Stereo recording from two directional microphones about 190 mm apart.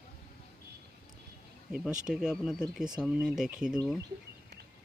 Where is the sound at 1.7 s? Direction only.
5° right (ahead or behind).